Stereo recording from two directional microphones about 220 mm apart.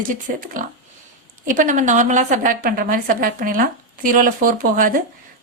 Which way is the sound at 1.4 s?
35° right (ahead or behind).